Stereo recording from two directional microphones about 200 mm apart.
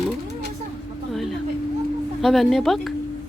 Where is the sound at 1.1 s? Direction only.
Centre (ahead or behind).